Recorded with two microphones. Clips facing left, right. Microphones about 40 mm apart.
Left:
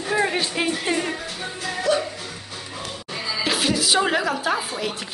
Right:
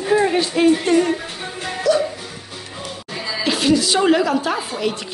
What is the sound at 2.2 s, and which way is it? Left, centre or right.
Music, centre.